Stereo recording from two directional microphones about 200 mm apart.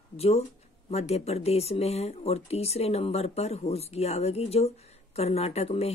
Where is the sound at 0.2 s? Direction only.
30° left (ahead or behind).